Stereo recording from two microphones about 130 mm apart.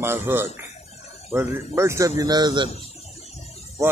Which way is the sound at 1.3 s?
20° right (ahead or behind).